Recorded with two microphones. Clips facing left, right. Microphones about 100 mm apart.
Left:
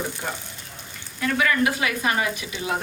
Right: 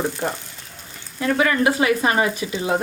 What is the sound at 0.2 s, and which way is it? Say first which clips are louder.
Speech: right 6 dB; 50° right (ahead or behind).